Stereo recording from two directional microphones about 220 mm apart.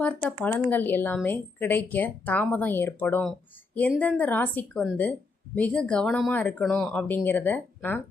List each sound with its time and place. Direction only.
0.0 s speech: 5° left (ahead or behind)